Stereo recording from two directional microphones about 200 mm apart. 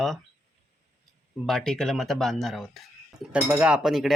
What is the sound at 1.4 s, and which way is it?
Speech, centre (ahead or behind).